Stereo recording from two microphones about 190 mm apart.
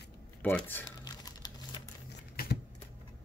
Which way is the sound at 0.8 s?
20° left (ahead or behind).